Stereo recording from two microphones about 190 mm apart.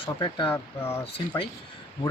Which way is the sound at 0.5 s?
15° left (ahead or behind).